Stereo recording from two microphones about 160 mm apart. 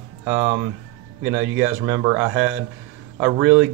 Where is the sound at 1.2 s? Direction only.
90° right.